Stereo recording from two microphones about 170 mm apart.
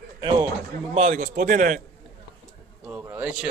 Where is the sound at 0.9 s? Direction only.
40° right (ahead or behind).